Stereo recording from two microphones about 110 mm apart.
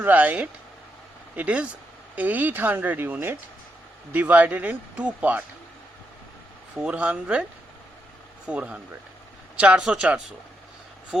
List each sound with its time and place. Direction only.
0.0 s speech: 15° right (ahead or behind)
6.7 s speech: 10° right (ahead or behind)
8.4 s speech: 10° right (ahead or behind)